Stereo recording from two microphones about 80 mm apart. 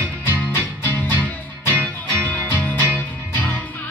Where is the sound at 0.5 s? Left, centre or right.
Left.